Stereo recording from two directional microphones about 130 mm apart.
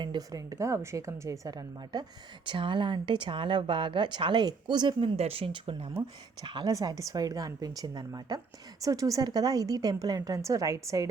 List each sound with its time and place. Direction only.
0.0 s a woman's voice: 30° right (ahead or behind)